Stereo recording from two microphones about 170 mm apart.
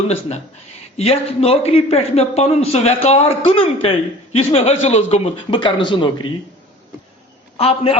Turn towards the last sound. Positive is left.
turn(degrees=35)  # may be behind; listen again after turning